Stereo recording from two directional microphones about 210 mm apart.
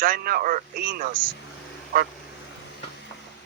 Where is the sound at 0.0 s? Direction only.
45° right (ahead or behind).